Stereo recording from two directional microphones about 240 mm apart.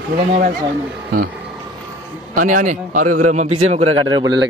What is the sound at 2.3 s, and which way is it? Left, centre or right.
A man's voice, right.